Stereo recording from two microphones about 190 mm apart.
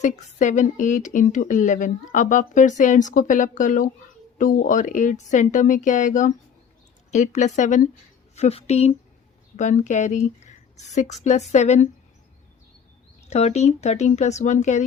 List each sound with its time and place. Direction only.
0.0 s speech: 40° left (ahead or behind)
13.3 s speech: 35° left (ahead or behind)